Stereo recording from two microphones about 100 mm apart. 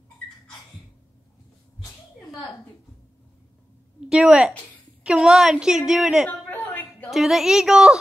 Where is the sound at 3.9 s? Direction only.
5° right (ahead or behind).